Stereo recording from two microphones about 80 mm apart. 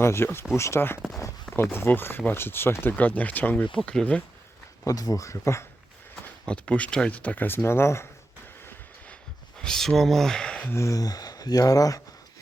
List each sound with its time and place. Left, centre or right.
0.0 s speech: left; by 4.2 s centre
4.9 s speech: left
6.4 s speech: centre; by 8.0 s left
9.6 s speech: centre
10.7 s speech: left